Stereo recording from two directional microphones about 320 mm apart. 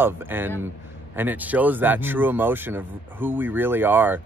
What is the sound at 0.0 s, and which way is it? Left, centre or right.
Speech, centre.